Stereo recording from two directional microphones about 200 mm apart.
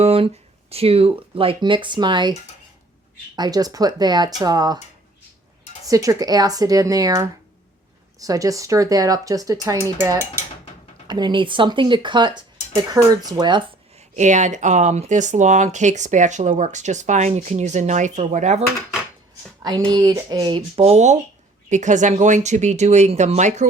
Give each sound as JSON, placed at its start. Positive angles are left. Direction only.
{"t": 0.0, "sound": "a sound", "side_deg": -30}
{"t": 0.7, "sound": "speech", "side_deg": -30}
{"t": 3.3, "sound": "speech", "side_deg": -20}
{"t": 5.8, "sound": "speech", "side_deg": -15}
{"t": 14.2, "sound": "speech", "side_deg": -35}
{"t": 19.6, "sound": "speech", "side_deg": -20}